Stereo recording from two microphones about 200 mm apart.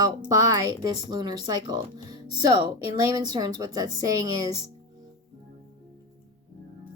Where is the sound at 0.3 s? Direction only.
15° right (ahead or behind).